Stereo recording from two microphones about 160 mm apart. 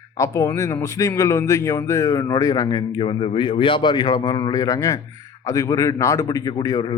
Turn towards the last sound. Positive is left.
turn(degrees=30)  # may be behind; listen again after turning